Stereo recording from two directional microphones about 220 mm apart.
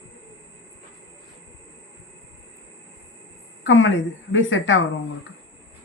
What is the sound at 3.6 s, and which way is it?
A woman's voice, 60° left (ahead or behind).